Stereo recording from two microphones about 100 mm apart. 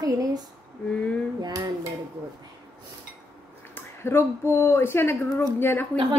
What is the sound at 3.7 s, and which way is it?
A woman's voice, 20° left (ahead or behind).